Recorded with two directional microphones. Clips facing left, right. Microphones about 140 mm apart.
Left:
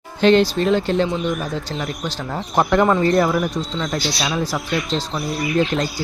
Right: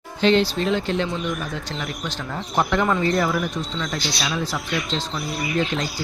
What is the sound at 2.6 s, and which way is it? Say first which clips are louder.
Speech: left 5 dB; 45° left (ahead or behind).